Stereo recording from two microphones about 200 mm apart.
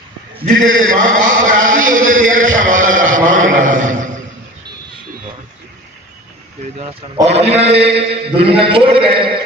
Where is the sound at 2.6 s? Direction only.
40° right (ahead or behind).